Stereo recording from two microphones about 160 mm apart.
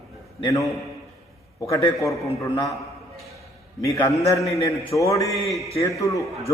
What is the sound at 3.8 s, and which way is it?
A man's voice, 20° left (ahead or behind).